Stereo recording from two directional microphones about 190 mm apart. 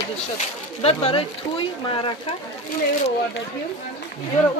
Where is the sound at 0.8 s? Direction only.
30° left (ahead or behind).